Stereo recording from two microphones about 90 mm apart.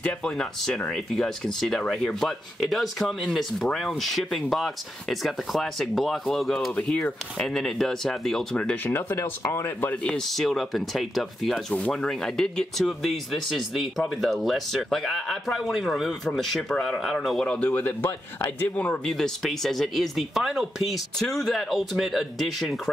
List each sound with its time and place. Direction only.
0.0 s speech: 10° left (ahead or behind)
6.7 s speech: 10° left (ahead or behind)
8.8 s speech: 30° left (ahead or behind)
9.8 s speech: 10° left (ahead or behind)
11.5 s speech: 10° left (ahead or behind)
19.1 s speech: 5° left (ahead or behind)